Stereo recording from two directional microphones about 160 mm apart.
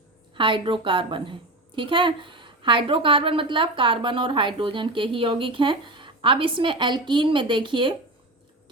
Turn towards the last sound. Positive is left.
turn(degrees=-30)  # may be behind; listen again after turning